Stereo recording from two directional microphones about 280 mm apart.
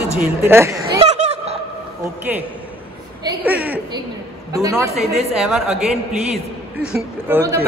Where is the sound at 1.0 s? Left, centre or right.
Right.